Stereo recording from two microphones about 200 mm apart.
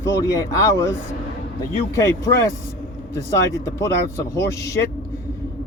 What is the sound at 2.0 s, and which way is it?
Speech, 15° left (ahead or behind).